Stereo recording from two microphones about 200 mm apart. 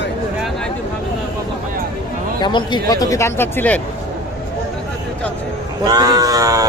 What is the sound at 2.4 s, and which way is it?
Speech, 25° left (ahead or behind).